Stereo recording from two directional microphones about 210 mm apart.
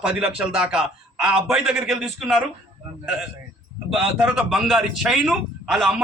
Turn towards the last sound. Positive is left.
turn(degrees=0)  # may be behind; listen again after turning